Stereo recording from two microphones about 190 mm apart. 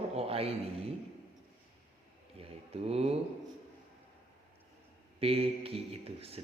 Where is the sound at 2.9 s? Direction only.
35° right (ahead or behind).